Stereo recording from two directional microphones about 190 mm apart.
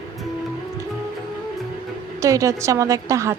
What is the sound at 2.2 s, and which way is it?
A woman's voice, 15° right (ahead or behind).